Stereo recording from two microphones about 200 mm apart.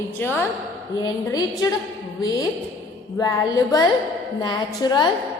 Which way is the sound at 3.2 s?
20° left (ahead or behind).